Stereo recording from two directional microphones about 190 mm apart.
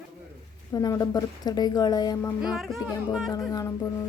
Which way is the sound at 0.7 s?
20° left (ahead or behind).